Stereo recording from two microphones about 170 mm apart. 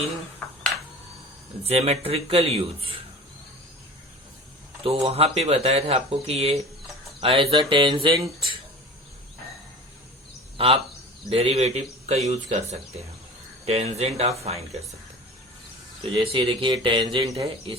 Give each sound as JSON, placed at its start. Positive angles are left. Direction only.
{"t": 0.4, "sound": "a sound", "side_deg": 10}
{"t": 1.6, "sound": "speech", "side_deg": -35}
{"t": 4.8, "sound": "speech", "side_deg": -35}
{"t": 11.3, "sound": "speech", "side_deg": -35}
{"t": 13.7, "sound": "speech", "side_deg": -40}
{"t": 16.1, "sound": "speech", "side_deg": -30}